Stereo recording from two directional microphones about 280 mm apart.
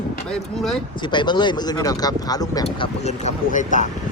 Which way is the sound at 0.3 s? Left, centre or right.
Centre.